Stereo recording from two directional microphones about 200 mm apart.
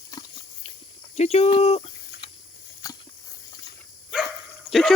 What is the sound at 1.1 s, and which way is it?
Speech, 30° left (ahead or behind).